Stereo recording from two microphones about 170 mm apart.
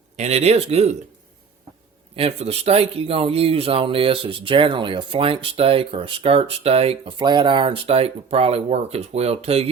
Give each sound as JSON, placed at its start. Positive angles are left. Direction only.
{"t": 0.2, "sound": "speech", "side_deg": -40}
{"t": 2.1, "sound": "speech", "side_deg": -35}